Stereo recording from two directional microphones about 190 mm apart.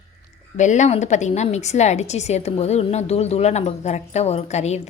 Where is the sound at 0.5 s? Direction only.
40° left (ahead or behind).